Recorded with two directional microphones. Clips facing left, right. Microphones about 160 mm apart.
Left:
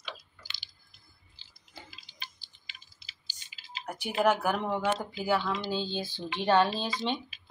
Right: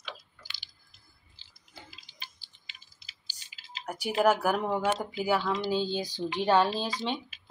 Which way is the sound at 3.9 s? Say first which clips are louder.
Right 2 dB; 10° right (ahead or behind).